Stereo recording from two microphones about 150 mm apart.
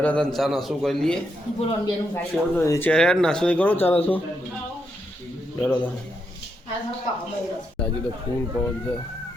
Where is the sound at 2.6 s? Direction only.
20° left (ahead or behind).